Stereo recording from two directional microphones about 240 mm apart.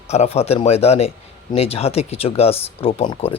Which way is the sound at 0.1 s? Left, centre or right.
Left.